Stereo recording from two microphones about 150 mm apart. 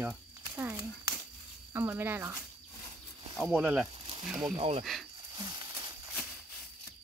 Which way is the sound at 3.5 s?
10° right (ahead or behind).